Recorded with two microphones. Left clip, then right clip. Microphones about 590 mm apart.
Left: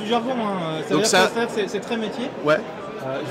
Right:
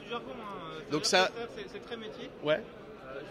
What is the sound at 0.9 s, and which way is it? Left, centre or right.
Speech, right.